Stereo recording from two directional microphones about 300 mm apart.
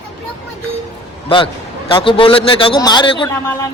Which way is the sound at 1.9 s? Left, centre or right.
Centre.